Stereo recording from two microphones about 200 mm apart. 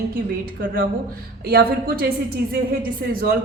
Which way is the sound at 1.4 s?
50° right (ahead or behind).